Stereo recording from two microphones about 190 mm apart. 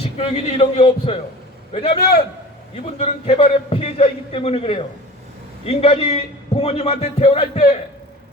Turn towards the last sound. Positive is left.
turn(degrees=35)  # may be behind; listen again after turning